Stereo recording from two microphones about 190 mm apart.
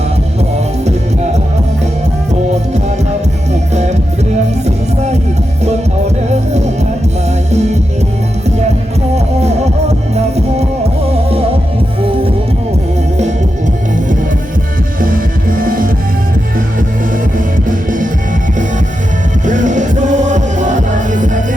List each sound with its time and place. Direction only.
3.5 s music: 35° right (ahead or behind)
7.5 s music: 35° right (ahead or behind)
9.1 s music: 35° right (ahead or behind)
15.0 s music: 45° right (ahead or behind)
17.3 s music: 45° right (ahead or behind)
19.5 s music: 40° right (ahead or behind)